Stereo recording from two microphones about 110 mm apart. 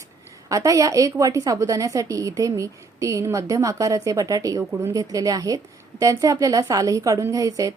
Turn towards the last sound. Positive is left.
turn(degrees=-30)  # may be behind; listen again after turning